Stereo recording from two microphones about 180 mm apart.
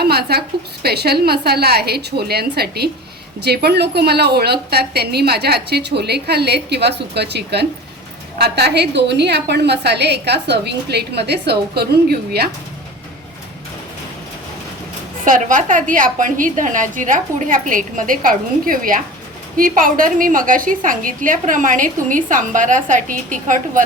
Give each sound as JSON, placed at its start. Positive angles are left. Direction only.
{"t": 0.0, "sound": "a woman's voice", "side_deg": -60}
{"t": 15.2, "sound": "a woman's voice", "side_deg": -45}